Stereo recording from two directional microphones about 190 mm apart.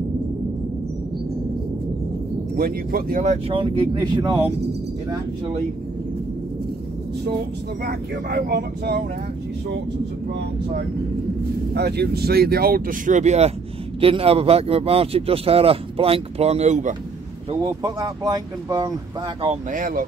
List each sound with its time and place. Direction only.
2.5 s speech: 50° right (ahead or behind)
3.4 s speech: 25° right (ahead or behind)
7.8 s speech: 55° right (ahead or behind)
11.7 s speech: 60° right (ahead or behind); by 16.9 s 40° right (ahead or behind)
17.5 s speech: 20° right (ahead or behind)
19.7 s speech: 50° right (ahead or behind)